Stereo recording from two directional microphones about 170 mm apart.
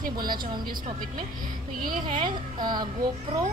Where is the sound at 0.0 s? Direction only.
60° right (ahead or behind).